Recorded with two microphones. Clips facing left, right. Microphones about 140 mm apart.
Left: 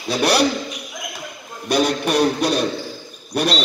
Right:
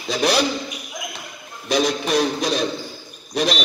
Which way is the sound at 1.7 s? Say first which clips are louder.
Left 1 dB; 60° left (ahead or behind).